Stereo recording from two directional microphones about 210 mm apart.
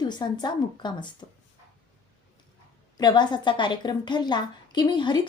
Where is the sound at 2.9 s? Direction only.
20° left (ahead or behind).